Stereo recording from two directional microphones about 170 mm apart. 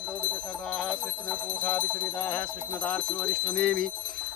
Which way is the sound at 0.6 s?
5° left (ahead or behind).